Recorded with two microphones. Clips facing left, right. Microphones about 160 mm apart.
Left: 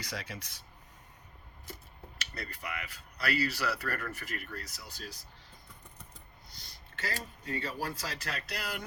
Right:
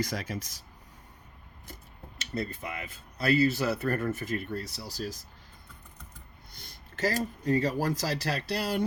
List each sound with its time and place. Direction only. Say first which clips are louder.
0.0 s speech: right 9 dB; 45° right (ahead or behind)
2.1 s speech: right 10 dB; 25° right (ahead or behind); by 5.2 s 40° right (ahead or behind)
6.5 s speech: right 5 dB; 50° right (ahead or behind); by 8.8 s 30° right (ahead or behind)